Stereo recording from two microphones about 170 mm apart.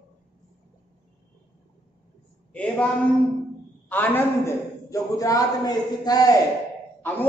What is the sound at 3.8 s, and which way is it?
A man's voice, 10° left (ahead or behind).